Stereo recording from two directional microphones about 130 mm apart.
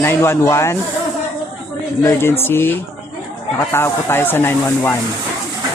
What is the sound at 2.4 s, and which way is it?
Speech, 20° left (ahead or behind).